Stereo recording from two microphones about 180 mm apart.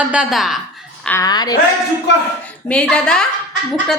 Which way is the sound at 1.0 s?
15° left (ahead or behind).